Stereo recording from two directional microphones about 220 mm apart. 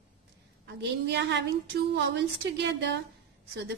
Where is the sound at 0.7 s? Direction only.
50° right (ahead or behind).